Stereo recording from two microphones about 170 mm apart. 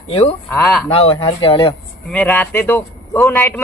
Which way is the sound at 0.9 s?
35° left (ahead or behind).